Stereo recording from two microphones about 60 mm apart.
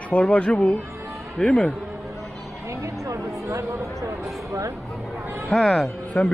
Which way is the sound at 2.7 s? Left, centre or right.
Right.